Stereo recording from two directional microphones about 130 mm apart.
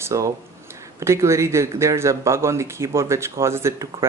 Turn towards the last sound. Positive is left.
turn(degrees=-20)  # may be behind; listen again after turning